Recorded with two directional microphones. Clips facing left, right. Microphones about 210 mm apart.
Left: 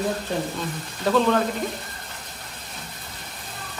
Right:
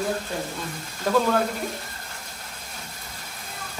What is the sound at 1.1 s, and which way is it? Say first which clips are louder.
Speech: left 2 dB; 10° right (ahead or behind).